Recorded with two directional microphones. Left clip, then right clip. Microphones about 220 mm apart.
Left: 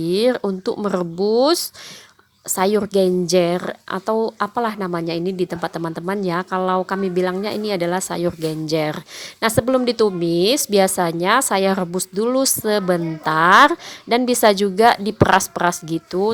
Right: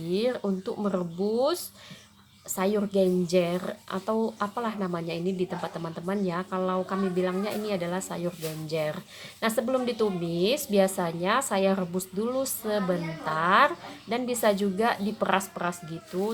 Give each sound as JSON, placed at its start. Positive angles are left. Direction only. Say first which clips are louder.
{"t": 0.0, "sound": "a woman's voice", "louder": "left 10 dB", "side_deg": 40}